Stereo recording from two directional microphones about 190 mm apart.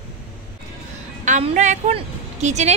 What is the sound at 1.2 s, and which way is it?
A woman's voice, 40° right (ahead or behind).